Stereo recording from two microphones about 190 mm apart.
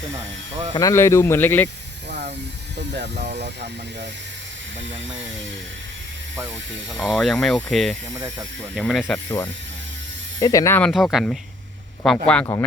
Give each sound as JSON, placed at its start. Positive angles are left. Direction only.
{"t": 0.7, "sound": "speech", "side_deg": 20}
{"t": 2.0, "sound": "a sound", "side_deg": -65}
{"t": 2.7, "sound": "speech", "side_deg": -65}
{"t": 6.9, "sound": "speech", "side_deg": 0}
{"t": 9.1, "sound": "speech", "side_deg": 15}